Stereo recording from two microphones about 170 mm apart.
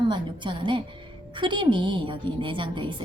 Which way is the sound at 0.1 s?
30° right (ahead or behind).